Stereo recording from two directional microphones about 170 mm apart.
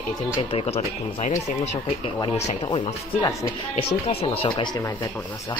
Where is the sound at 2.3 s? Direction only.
40° left (ahead or behind); by 3.4 s 25° left (ahead or behind).